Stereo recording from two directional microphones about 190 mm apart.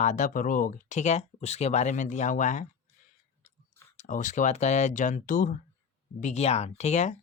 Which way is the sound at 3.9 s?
40° left (ahead or behind).